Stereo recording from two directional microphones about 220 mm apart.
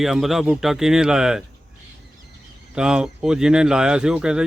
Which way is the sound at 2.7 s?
5° right (ahead or behind).